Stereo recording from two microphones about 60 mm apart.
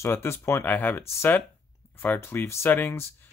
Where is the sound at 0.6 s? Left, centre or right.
Left.